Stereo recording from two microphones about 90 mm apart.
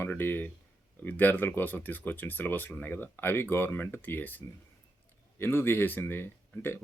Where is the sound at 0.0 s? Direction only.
20° left (ahead or behind).